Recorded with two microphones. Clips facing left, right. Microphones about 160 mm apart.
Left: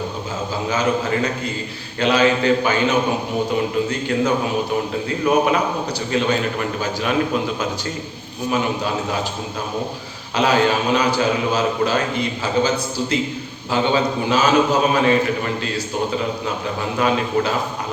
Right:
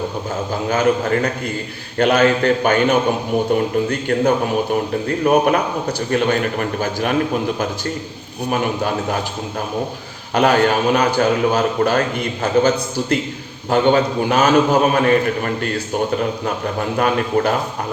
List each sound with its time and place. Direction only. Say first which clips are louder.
0.7 s a man's voice: right 4 dB; 55° right (ahead or behind)
8.4 s a man's voice: right 1 dB; 55° right (ahead or behind)
10.3 s a man's voice: right 3 dB; 55° right (ahead or behind)
17.0 s a man's voice: right 2 dB; 55° right (ahead or behind)